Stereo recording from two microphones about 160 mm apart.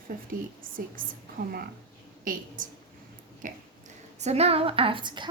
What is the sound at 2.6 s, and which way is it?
Speech, 55° right (ahead or behind).